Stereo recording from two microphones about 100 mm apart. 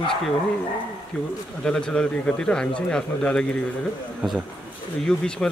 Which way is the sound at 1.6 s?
10° left (ahead or behind).